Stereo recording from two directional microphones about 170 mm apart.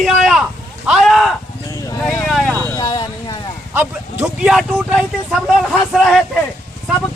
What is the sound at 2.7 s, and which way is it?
Vehicle, 25° left (ahead or behind).